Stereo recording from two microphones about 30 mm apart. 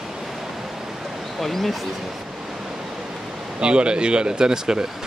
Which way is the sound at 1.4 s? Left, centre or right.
Centre.